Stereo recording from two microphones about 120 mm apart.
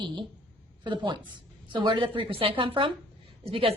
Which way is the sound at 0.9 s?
40° right (ahead or behind).